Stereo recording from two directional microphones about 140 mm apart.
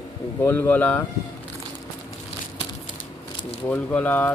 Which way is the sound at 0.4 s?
15° left (ahead or behind).